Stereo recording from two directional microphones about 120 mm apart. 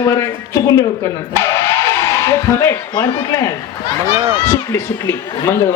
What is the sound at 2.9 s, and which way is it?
Speech, 35° left (ahead or behind).